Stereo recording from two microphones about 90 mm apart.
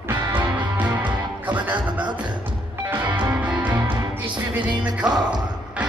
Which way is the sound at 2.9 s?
25° right (ahead or behind).